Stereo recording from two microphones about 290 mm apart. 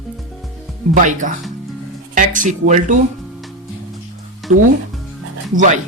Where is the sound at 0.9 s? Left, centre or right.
Right.